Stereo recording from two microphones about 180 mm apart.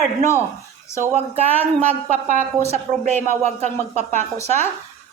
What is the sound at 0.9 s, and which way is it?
Speech, 15° left (ahead or behind).